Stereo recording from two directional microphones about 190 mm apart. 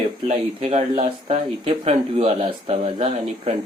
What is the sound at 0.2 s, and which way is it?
Speech, 35° right (ahead or behind).